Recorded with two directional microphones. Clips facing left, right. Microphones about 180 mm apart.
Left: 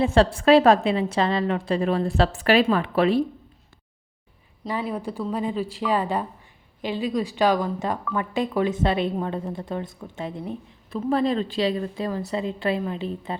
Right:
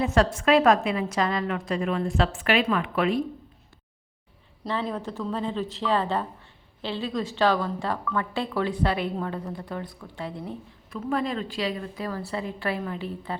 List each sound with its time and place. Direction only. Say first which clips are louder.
0.0 s a woman's voice: left 4 dB; 30° left (ahead or behind)
4.6 s a woman's voice: left 1 dB; 10° left (ahead or behind)
10.9 s a woman's voice: left 5 dB; 30° left (ahead or behind)